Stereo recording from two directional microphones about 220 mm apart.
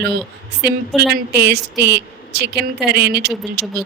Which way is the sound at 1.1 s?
50° right (ahead or behind).